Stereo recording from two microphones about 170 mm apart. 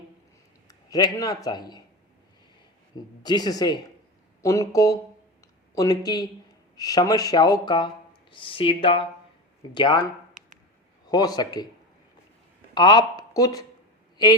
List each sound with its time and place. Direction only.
0.7 s a man's voice: 20° left (ahead or behind)
3.2 s speech: 25° left (ahead or behind)
11.0 s speech: 25° left (ahead or behind)
12.7 s speech: 25° left (ahead or behind)